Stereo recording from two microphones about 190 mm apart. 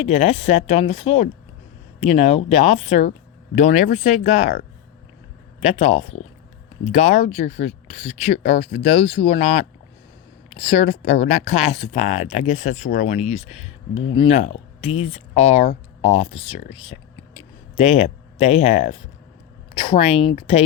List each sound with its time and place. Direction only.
0.0 s speech: 35° left (ahead or behind)
5.6 s speech: 35° left (ahead or behind)